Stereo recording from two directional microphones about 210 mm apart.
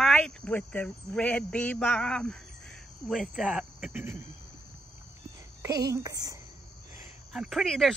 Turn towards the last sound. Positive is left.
turn(degrees=0)  # may be behind; listen again after turning